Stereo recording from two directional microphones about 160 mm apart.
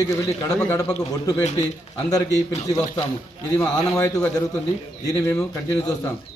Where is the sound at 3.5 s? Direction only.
20° left (ahead or behind).